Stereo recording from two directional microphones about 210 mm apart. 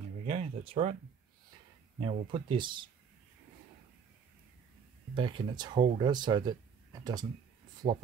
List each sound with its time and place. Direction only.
0.3 s speech: 25° right (ahead or behind)
2.0 s speech: 25° right (ahead or behind)
5.1 s speech: 20° right (ahead or behind)